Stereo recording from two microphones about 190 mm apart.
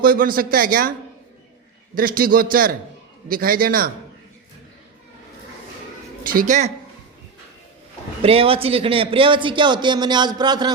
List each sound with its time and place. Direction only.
0.0 s a man's voice: 50° right (ahead or behind)
2.0 s a man's voice: 50° right (ahead or behind)
6.2 s a man's voice: 45° right (ahead or behind)
8.2 s speech: 30° right (ahead or behind)